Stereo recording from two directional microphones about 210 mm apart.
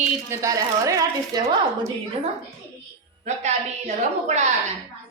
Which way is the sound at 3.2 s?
35° right (ahead or behind).